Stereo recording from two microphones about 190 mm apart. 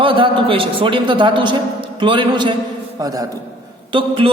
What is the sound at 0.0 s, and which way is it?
A man's voice, 30° right (ahead or behind).